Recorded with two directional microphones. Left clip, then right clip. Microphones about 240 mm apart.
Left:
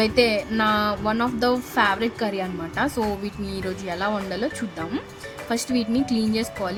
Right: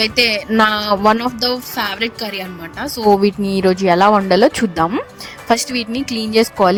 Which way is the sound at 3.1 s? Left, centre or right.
Right.